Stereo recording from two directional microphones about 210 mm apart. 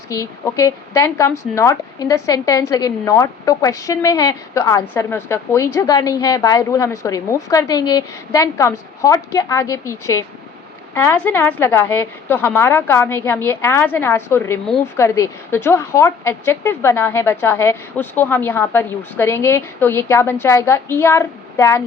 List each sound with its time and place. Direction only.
0.1 s speech: 15° left (ahead or behind)